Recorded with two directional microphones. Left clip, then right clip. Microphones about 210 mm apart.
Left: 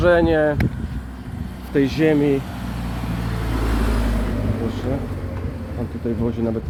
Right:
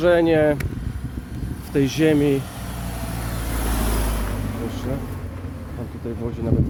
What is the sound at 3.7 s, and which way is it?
Vehicle, 60° right (ahead or behind).